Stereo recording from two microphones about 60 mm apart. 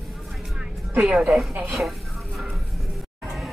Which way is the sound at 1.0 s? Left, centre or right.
Centre.